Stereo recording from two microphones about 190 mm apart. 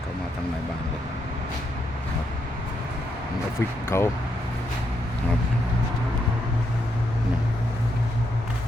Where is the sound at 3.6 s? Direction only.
15° left (ahead or behind).